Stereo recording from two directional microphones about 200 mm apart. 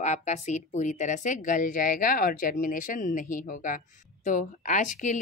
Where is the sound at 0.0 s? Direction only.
35° left (ahead or behind).